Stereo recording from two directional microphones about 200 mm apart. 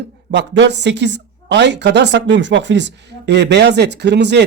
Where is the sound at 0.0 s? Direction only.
60° right (ahead or behind).